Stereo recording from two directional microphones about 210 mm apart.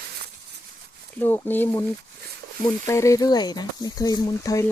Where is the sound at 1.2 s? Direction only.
10° left (ahead or behind).